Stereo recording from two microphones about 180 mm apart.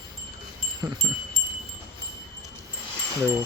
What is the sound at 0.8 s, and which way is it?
Speech, 15° right (ahead or behind).